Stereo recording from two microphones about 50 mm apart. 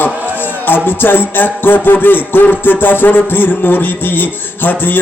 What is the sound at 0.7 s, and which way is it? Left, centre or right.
Music, left.